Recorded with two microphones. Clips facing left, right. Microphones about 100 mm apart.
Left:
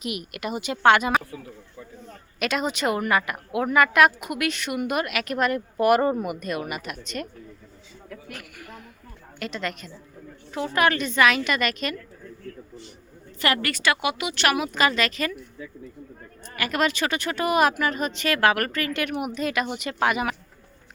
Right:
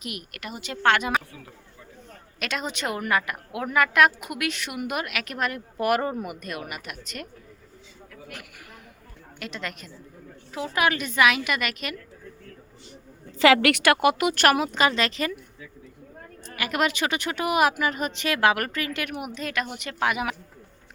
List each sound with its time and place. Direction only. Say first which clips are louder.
0.0 s speech: left 6 dB; 10° left (ahead or behind)
2.4 s speech: left 5 dB; 5° left (ahead or behind)
8.3 s speech: left 2 dB; 15° right (ahead or behind)
9.4 s speech: left 4 dB; centre (ahead or behind)
13.4 s a woman's voice: right 6 dB; 85° right; by 14.7 s 40° right (ahead or behind)
14.7 s speech: even; 25° right (ahead or behind)
16.6 s speech: left 1 dB; 15° right (ahead or behind)